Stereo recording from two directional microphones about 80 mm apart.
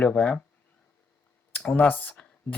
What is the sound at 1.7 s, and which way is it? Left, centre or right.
Speech, left.